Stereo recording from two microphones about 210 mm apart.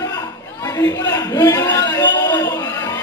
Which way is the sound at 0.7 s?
15° left (ahead or behind).